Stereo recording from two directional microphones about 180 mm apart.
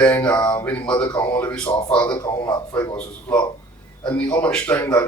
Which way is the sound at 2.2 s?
25° left (ahead or behind).